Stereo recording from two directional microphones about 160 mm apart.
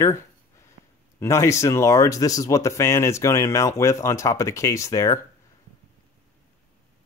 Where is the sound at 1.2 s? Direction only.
20° left (ahead or behind).